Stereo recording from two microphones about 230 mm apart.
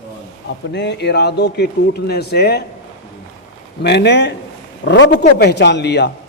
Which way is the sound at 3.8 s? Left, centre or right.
Left.